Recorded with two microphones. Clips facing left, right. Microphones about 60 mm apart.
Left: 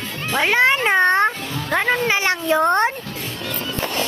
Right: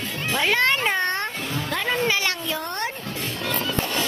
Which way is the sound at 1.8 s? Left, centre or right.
Left.